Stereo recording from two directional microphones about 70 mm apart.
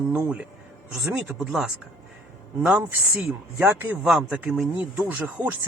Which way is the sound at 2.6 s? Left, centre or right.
Centre.